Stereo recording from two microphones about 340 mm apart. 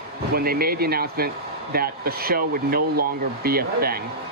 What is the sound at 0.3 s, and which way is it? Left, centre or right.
Speech, right.